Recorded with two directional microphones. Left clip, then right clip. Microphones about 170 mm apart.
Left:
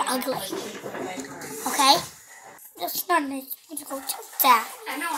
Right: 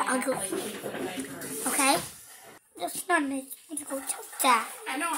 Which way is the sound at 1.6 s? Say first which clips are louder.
Left 7 dB; 10° right (ahead or behind).